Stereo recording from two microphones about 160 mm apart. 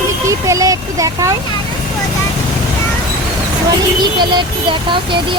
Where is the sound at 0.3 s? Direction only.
20° right (ahead or behind).